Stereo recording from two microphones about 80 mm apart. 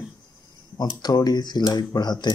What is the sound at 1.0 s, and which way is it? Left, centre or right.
Speech, left.